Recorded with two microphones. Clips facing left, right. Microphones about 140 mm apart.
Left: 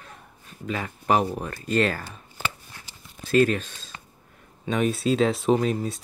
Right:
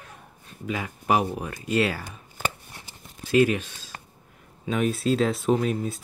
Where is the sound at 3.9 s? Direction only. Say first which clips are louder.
Right 3 dB; 50° right (ahead or behind).